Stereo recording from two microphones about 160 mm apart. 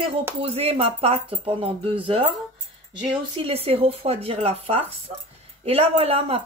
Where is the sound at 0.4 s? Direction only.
40° right (ahead or behind).